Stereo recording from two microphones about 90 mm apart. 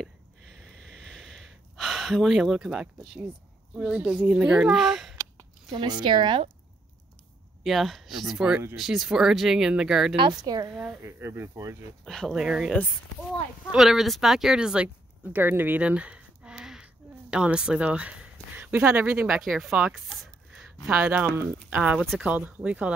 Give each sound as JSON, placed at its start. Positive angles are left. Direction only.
{"t": 0.6, "sound": "a sound", "side_deg": 5}
{"t": 3.7, "sound": "a child's voice", "side_deg": -10}
{"t": 5.9, "sound": "speech", "side_deg": -55}
{"t": 7.6, "sound": "speech", "side_deg": 0}
{"t": 10.1, "sound": "a woman's voice", "side_deg": -55}
{"t": 10.7, "sound": "a child's voice", "side_deg": -10}
{"t": 11.0, "sound": "speech", "side_deg": -30}
{"t": 12.0, "sound": "speech", "side_deg": 5}
{"t": 12.4, "sound": "a child's voice", "side_deg": -5}
{"t": 19.2, "sound": "a child's voice", "side_deg": -5}
{"t": 19.9, "sound": "chopping", "side_deg": 0}
{"t": 20.8, "sound": "a child's voice", "side_deg": -20}